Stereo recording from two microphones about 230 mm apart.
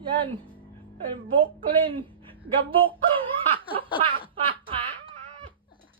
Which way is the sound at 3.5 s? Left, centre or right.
Right.